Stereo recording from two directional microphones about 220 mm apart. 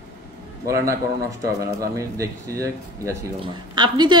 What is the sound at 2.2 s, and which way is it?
A man's voice, 15° right (ahead or behind).